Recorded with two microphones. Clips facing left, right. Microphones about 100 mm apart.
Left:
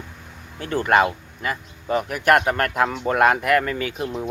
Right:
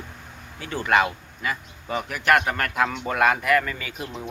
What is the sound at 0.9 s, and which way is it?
Speech, 40° left (ahead or behind).